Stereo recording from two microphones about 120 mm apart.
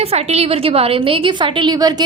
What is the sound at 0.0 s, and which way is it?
A woman's voice, 60° right (ahead or behind).